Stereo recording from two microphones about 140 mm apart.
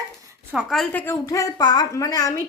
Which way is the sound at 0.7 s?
5° left (ahead or behind).